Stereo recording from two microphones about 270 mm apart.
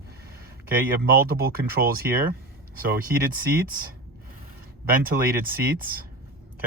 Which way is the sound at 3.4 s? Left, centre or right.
Right.